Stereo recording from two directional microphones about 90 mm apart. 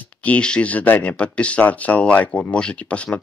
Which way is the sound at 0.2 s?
15° left (ahead or behind).